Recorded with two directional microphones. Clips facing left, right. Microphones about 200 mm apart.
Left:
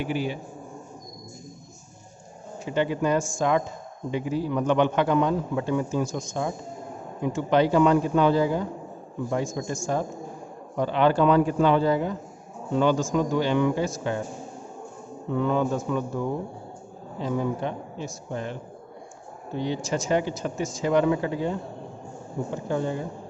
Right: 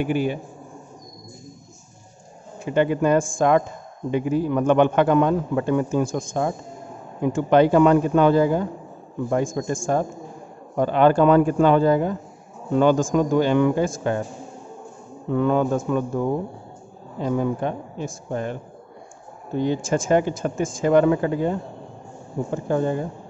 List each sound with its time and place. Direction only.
0.0 s a man's voice: 55° right (ahead or behind)
2.6 s a man's voice: 55° right (ahead or behind)
15.3 s a man's voice: 50° right (ahead or behind)